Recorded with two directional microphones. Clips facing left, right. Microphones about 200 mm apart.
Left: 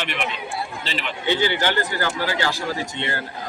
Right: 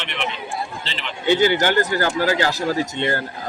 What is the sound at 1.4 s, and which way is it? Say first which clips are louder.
Speech: right 5 dB; 45° right (ahead or behind).